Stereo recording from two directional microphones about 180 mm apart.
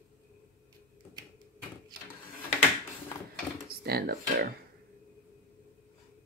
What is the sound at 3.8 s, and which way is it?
Speech, 60° right (ahead or behind).